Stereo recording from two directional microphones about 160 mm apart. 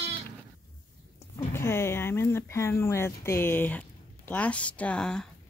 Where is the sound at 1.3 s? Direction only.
15° left (ahead or behind).